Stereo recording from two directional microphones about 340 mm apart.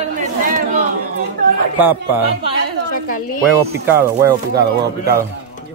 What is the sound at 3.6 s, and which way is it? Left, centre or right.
Speech, centre.